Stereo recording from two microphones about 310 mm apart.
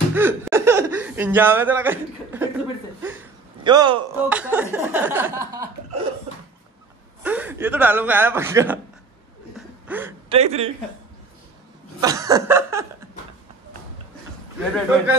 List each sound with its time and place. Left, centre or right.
0.1 s chuckle: centre
4.3 s speech: centre
7.2 s speech: centre
9.8 s speech: centre
10.3 s speech: centre
12.0 s chuckle: centre